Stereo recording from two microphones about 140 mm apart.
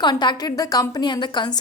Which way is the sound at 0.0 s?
30° left (ahead or behind).